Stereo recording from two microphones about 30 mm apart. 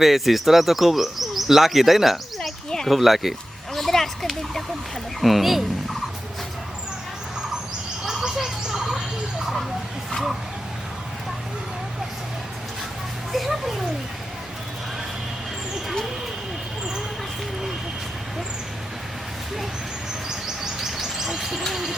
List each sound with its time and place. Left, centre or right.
0.0 s speech: centre
2.6 s a sound: centre
2.9 s speech: centre
3.8 s a sound: centre
5.2 s turkey: centre
8.2 s fowl: right
13.3 s music: centre
20.6 s bird: centre